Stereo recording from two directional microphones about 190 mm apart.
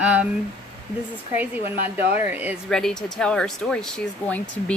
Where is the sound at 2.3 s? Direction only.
10° right (ahead or behind).